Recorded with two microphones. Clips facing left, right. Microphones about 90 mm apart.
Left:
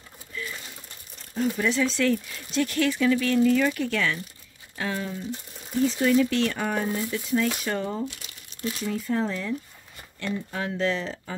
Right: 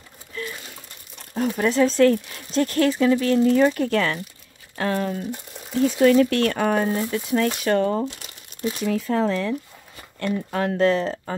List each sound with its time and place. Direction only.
1.3 s speech: 50° right (ahead or behind)
4.7 s speech: 55° right (ahead or behind)
8.8 s speech: 85° right
10.2 s speech: 55° right (ahead or behind)